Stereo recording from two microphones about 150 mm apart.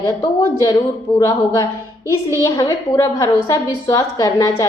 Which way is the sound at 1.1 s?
25° left (ahead or behind).